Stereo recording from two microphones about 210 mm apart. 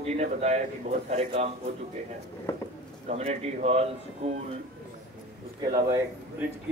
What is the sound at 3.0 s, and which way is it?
Speech, 30° right (ahead or behind).